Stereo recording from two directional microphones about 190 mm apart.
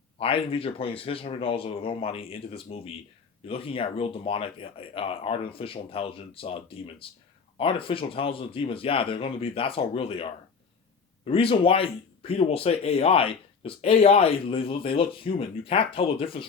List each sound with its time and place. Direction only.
0.2 s speech: 30° left (ahead or behind)
11.3 s speech: 30° left (ahead or behind)